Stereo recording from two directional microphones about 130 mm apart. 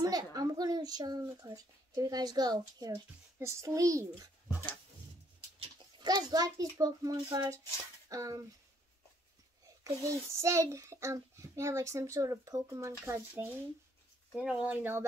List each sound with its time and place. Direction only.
0.0 s a child's voice: 30° right (ahead or behind)
5.6 s a child's voice: 35° right (ahead or behind)
9.8 s a child's voice: 25° right (ahead or behind)